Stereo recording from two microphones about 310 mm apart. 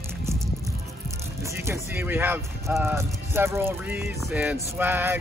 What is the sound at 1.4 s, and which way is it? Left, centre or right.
Speech, centre.